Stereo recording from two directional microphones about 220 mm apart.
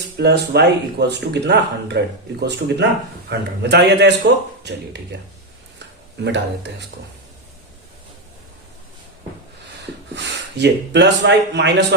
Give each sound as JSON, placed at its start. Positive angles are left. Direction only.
{"t": 0.2, "sound": "speech", "side_deg": -50}
{"t": 10.2, "sound": "speech", "side_deg": -50}